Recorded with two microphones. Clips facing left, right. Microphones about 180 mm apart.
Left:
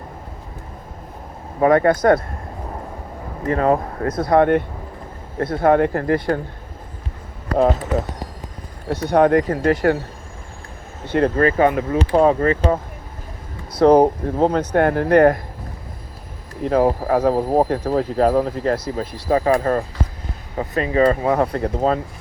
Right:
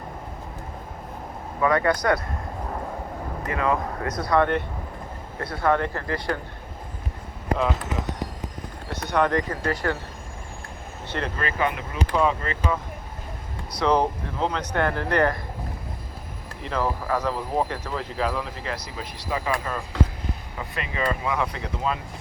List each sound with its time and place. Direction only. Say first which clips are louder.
1.6 s speech: left 7 dB; 45° left (ahead or behind)
3.5 s speech: left 7 dB; 45° left (ahead or behind)
8.9 s speech: left 8 dB; 55° left (ahead or behind)
11.1 s speech: left 12 dB; 45° left (ahead or behind)
16.6 s speech: left 9 dB; 45° left (ahead or behind)